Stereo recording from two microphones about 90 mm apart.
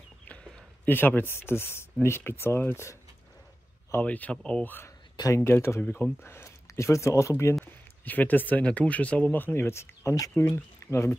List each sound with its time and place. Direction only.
0.3 s a sound: 10° left (ahead or behind)
0.9 s speech: 20° left (ahead or behind)
4.0 s speech: 15° left (ahead or behind); by 7.5 s 35° left (ahead or behind)
7.6 s speech: 20° left (ahead or behind)